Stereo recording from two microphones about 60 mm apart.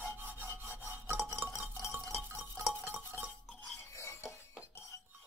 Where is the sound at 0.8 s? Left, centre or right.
Right.